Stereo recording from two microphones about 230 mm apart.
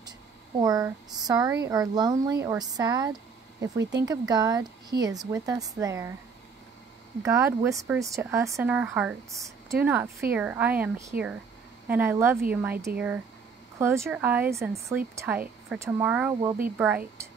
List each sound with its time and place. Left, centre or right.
0.6 s speech: centre
7.2 s speech: centre